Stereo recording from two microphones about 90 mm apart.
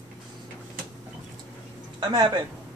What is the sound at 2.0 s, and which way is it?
Speech, 55° right (ahead or behind).